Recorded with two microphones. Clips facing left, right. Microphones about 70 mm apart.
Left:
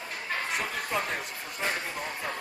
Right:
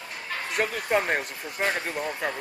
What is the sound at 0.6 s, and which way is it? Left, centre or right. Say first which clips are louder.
Speech: right 6 dB; right.